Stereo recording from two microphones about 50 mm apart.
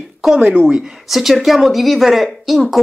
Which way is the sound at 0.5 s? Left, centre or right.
Right.